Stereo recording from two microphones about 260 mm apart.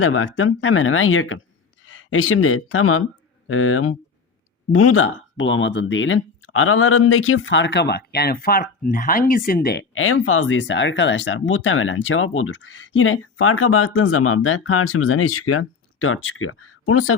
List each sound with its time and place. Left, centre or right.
0.0 s speech: left